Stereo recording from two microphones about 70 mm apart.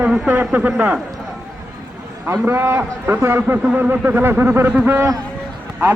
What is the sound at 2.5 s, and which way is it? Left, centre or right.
A man's voice, right.